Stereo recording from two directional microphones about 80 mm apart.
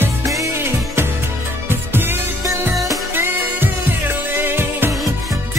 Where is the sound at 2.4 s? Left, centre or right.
Right.